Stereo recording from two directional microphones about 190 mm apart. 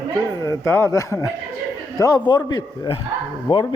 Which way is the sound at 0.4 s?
15° left (ahead or behind).